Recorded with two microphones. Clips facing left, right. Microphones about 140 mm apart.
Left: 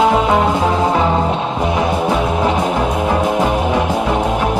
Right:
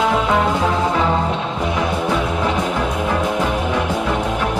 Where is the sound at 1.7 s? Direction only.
25° left (ahead or behind).